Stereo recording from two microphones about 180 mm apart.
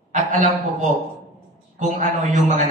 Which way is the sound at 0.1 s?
40° right (ahead or behind).